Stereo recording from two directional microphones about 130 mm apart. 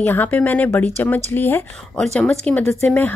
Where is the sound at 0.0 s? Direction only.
15° left (ahead or behind).